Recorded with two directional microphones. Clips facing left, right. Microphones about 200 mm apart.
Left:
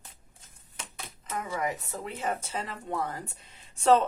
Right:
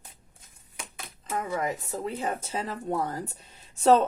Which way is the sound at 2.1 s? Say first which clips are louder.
Right 1 dB; 35° right (ahead or behind).